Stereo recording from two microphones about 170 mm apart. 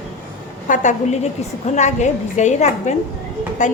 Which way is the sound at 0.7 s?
45° left (ahead or behind).